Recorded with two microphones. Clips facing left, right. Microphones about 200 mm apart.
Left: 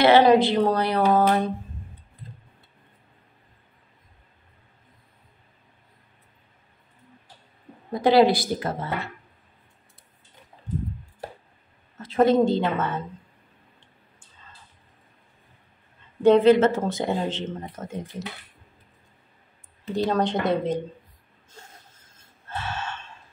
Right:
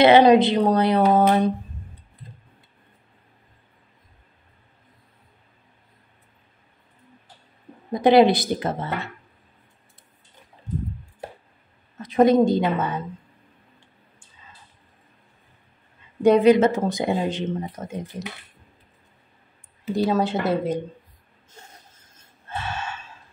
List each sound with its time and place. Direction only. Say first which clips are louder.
0.0 s a woman's voice: right 3 dB; 20° right (ahead or behind)
7.9 s a woman's voice: right 2 dB; 20° right (ahead or behind)
12.0 s speech: right 2 dB; 15° right (ahead or behind)
13.7 s a sound: right 1 dB; 10° right (ahead or behind)
16.2 s speech: right 1 dB; 15° right (ahead or behind)
19.8 s speech: right 2 dB; 5° right (ahead or behind)
22.5 s gasp: right 1 dB; 15° right (ahead or behind)